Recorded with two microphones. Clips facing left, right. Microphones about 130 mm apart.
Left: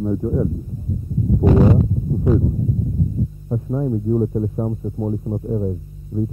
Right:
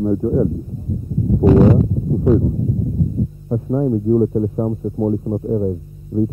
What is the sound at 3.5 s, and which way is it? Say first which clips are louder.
Speech: right 5 dB; 15° right (ahead or behind).